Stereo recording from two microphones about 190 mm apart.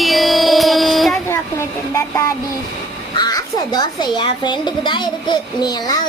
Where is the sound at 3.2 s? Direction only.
20° left (ahead or behind).